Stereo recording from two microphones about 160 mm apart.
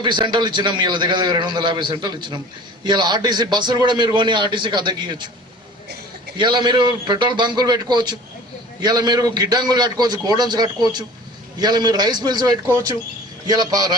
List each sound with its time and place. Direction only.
0.0 s a man's voice: 30° right (ahead or behind)
6.3 s a man's voice: 30° right (ahead or behind)